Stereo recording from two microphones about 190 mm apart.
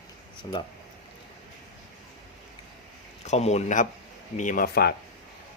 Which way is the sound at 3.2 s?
35° left (ahead or behind).